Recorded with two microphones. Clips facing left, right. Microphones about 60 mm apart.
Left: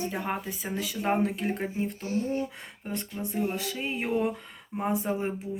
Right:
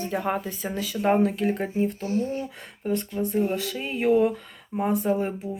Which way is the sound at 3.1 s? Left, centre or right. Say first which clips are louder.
Right 8 dB; centre.